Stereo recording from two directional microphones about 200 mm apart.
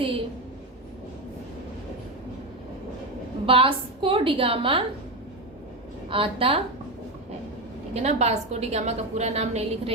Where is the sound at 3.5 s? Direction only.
25° right (ahead or behind).